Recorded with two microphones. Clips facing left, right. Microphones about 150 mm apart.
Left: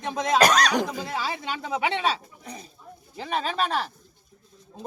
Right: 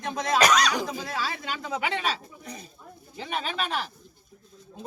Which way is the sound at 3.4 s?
35° left (ahead or behind).